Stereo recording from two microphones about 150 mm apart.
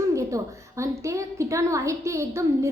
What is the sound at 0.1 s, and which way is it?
A woman's voice, 20° right (ahead or behind).